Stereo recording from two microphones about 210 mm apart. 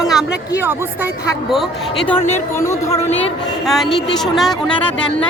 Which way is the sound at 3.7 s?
Centre (ahead or behind).